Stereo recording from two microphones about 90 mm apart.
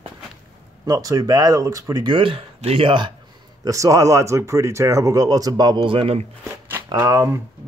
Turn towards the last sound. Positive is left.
turn(degrees=-35)  # may be behind; listen again after turning